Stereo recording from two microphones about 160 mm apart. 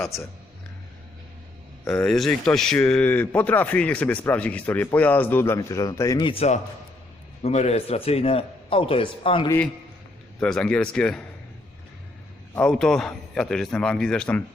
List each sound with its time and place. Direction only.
1.9 s a man's voice: 5° left (ahead or behind); by 6.2 s 20° left (ahead or behind)
6.2 s a man's voice: 40° left (ahead or behind)
10.4 s a man's voice: 5° left (ahead or behind)
12.5 s a man's voice: 5° left (ahead or behind)